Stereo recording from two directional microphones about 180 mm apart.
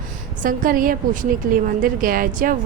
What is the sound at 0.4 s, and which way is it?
A woman's voice, 50° right (ahead or behind).